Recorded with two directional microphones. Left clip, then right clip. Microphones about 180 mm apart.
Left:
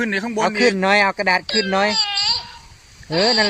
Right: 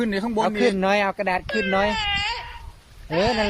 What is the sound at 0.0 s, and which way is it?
Speech, 5° right (ahead or behind).